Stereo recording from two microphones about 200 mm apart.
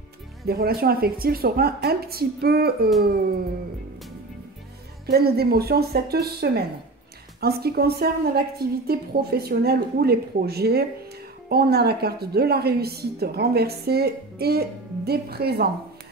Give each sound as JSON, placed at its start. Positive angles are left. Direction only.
{"t": 0.5, "sound": "a woman's voice", "side_deg": -50}
{"t": 5.0, "sound": "a woman's voice", "side_deg": -50}